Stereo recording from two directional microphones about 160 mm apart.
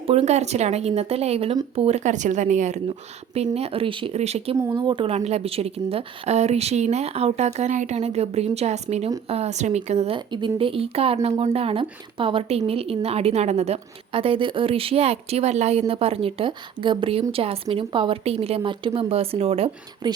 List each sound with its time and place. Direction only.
0.1 s speech: 40° right (ahead or behind)
4.7 s speech: 30° right (ahead or behind)
10.3 s speech: 30° right (ahead or behind)
20.0 s speech: 25° right (ahead or behind)